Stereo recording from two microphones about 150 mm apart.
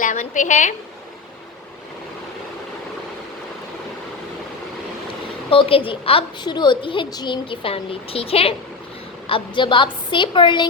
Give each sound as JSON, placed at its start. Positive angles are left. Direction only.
{"t": 0.0, "sound": "a woman's voice", "side_deg": 55}
{"t": 5.5, "sound": "a woman's voice", "side_deg": 35}